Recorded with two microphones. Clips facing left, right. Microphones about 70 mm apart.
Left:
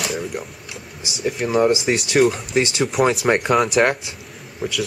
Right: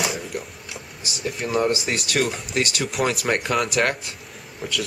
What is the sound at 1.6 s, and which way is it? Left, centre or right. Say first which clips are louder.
Speech: left 5 dB; centre.